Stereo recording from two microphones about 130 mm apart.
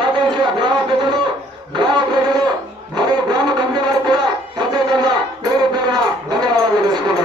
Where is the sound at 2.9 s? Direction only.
35° right (ahead or behind).